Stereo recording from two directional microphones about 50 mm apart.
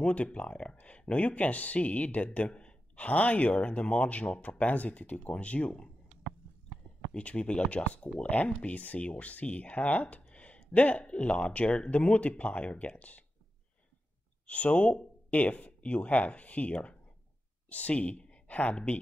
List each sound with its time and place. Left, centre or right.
0.0 s speech: left
7.2 s speech: left
14.4 s speech: left